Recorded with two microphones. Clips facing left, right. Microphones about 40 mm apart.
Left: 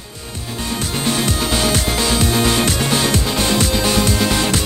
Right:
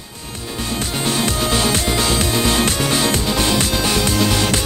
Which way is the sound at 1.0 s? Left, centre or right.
Right.